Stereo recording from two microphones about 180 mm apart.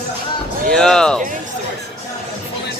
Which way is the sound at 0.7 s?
5° left (ahead or behind).